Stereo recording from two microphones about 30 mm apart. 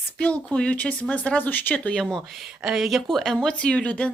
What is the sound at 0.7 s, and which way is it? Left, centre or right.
Speech, left.